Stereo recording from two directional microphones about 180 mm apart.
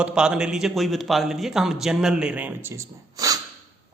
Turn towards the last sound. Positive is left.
turn(degrees=-20)  # may be behind; listen again after turning